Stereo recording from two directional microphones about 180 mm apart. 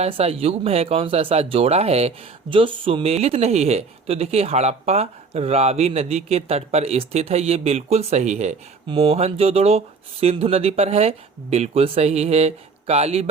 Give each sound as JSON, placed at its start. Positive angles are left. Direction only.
{"t": 0.0, "sound": "speech", "side_deg": -35}